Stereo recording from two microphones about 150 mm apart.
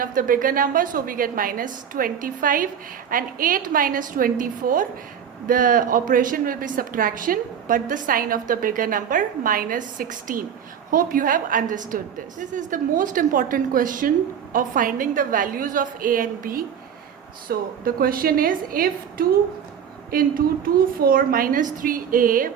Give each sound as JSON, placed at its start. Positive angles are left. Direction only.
{"t": 0.0, "sound": "a woman's voice", "side_deg": -70}